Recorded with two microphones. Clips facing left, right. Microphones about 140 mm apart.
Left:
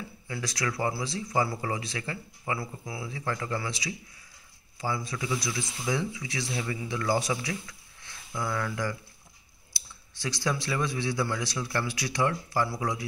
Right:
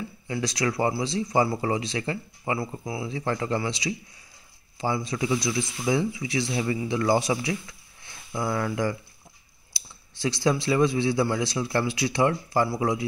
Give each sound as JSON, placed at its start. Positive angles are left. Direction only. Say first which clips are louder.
{"t": 0.3, "sound": "a man's voice", "louder": "right 6 dB", "side_deg": -20}
{"t": 10.2, "sound": "a man's voice", "louder": "right 7 dB", "side_deg": -20}